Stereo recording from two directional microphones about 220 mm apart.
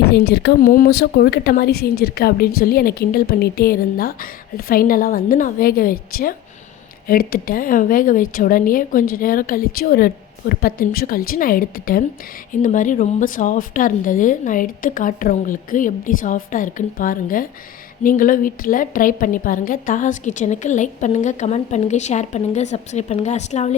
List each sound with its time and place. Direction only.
0.1 s a woman's voice: 45° left (ahead or behind); by 23.7 s 30° left (ahead or behind)